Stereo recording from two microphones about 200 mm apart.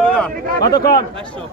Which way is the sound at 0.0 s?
5° left (ahead or behind).